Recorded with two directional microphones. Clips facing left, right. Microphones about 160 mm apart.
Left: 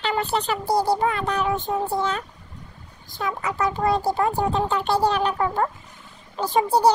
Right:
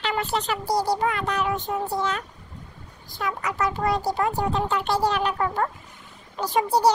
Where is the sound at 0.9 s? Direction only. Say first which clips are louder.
Left 2 dB; 30° left (ahead or behind).